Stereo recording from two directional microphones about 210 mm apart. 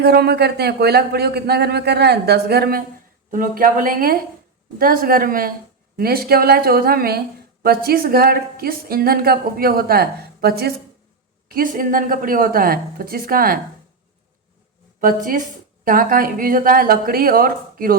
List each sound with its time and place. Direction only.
0.0 s a woman's voice: 50° right (ahead or behind)
15.0 s a woman's voice: 40° right (ahead or behind)